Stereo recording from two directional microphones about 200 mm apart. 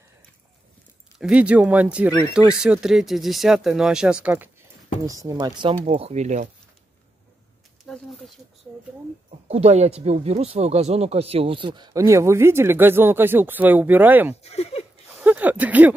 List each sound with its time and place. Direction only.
1.1 s speech: 5° right (ahead or behind); by 6.5 s 35° right (ahead or behind)
7.8 s speech: centre (ahead or behind)
9.5 s speech: 35° right (ahead or behind); by 14.3 s 10° right (ahead or behind)
14.4 s speech: 30° left (ahead or behind)
15.1 s speech: 10° right (ahead or behind)